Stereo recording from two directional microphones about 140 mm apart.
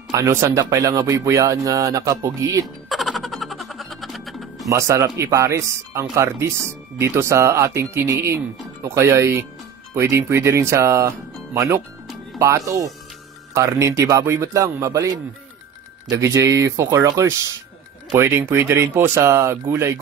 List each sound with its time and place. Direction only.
0.1 s speech: 20° right (ahead or behind)
2.6 s music: centre (ahead or behind)
4.6 s speech: 20° right (ahead or behind)
16.1 s speech: 25° right (ahead or behind)